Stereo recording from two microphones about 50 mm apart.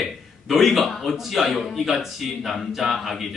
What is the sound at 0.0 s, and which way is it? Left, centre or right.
A man's voice, centre.